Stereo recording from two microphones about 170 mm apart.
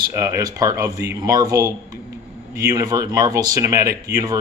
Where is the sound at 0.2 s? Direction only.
20° right (ahead or behind).